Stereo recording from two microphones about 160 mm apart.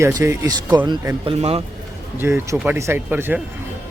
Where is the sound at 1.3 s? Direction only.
40° right (ahead or behind).